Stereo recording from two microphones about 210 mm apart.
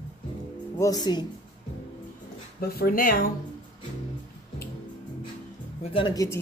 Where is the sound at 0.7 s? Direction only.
15° left (ahead or behind).